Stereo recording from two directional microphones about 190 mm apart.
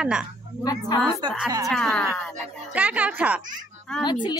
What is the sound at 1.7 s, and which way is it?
A woman's voice, centre (ahead or behind).